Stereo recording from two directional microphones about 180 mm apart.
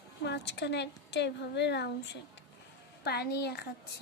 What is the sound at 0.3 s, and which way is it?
A woman's voice, 70° left (ahead or behind).